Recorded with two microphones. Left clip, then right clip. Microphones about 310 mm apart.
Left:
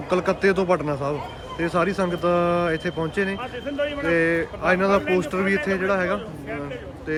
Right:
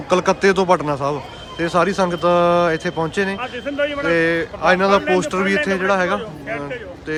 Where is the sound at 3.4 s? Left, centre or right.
Right.